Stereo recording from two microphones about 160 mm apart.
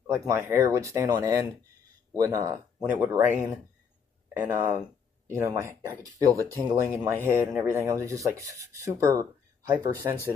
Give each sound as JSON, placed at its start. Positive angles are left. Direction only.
{"t": 0.0, "sound": "speech", "side_deg": -15}
{"t": 3.0, "sound": "rub", "side_deg": -15}
{"t": 4.5, "sound": "speech", "side_deg": -20}
{"t": 7.0, "sound": "rub", "side_deg": -15}